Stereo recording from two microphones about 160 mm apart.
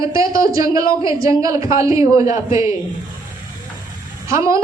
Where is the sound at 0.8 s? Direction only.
30° left (ahead or behind).